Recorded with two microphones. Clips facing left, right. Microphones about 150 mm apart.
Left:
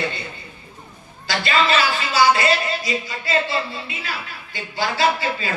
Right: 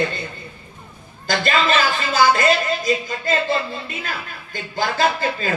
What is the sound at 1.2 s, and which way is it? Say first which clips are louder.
A man's voice: right 1 dB; 45° right (ahead or behind).